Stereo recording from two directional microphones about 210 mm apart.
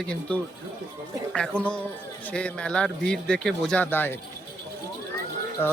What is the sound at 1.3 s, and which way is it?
Speech, 5° left (ahead or behind).